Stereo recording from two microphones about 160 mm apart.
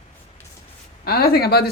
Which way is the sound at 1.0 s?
75° left (ahead or behind).